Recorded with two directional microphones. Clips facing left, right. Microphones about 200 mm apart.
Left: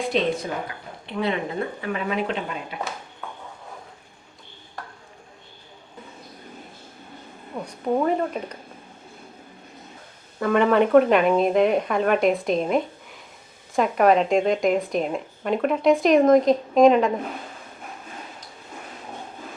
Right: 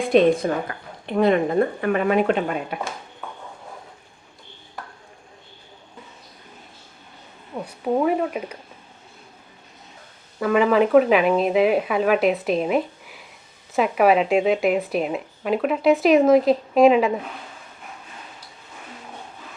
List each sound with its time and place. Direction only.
0.1 s speech: 50° right (ahead or behind)
7.6 s speech: 5° right (ahead or behind)
10.4 s speech: centre (ahead or behind)